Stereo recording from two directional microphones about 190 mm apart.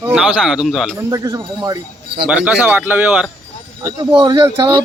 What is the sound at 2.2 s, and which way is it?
Speech, 5° right (ahead or behind).